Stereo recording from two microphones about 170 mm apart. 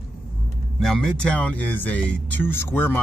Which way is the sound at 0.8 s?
Centre (ahead or behind).